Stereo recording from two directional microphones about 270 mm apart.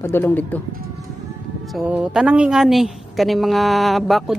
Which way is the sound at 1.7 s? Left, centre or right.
Centre.